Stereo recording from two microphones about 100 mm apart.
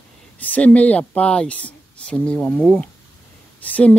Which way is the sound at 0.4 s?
15° left (ahead or behind).